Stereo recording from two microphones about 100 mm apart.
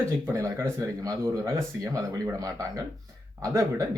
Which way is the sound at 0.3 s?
30° right (ahead or behind).